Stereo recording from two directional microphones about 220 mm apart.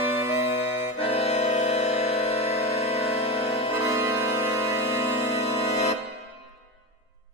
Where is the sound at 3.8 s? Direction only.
10° right (ahead or behind).